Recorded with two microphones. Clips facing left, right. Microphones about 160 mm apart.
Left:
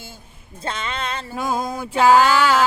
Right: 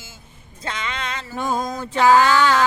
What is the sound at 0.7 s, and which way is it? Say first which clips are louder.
Music: left 2 dB; 30° left (ahead or behind).